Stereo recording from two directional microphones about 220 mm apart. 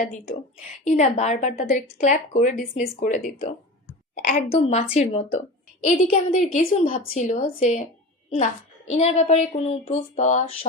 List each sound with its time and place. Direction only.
0.9 s a woman's voice: 30° left (ahead or behind)
8.9 s speech: 30° left (ahead or behind)